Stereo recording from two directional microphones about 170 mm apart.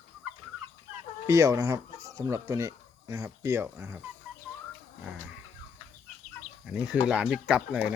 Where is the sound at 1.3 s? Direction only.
20° right (ahead or behind).